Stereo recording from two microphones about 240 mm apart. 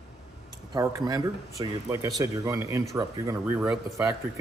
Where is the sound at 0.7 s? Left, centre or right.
Centre.